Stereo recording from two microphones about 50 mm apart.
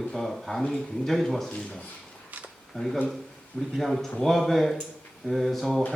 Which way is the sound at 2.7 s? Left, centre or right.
Centre.